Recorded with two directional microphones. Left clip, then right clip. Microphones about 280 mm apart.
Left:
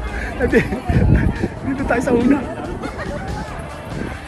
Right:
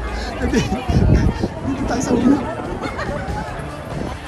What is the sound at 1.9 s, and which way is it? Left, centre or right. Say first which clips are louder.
Speech: left 4 dB; centre.